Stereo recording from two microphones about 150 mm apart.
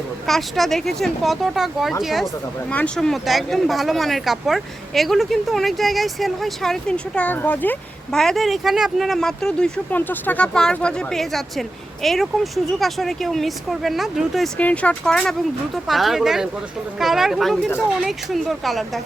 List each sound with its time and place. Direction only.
0.3 s speech: centre (ahead or behind)